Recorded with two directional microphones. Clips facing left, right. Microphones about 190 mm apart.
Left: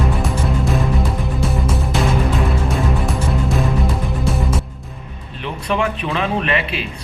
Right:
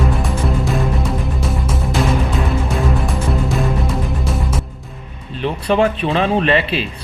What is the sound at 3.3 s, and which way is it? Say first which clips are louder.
Music: right 1 dB; centre (ahead or behind).